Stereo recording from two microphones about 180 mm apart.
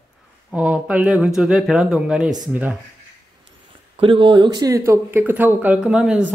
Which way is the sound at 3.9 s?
30° right (ahead or behind).